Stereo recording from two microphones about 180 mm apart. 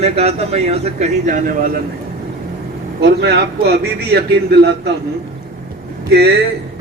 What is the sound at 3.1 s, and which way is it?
A man's voice, 60° right (ahead or behind).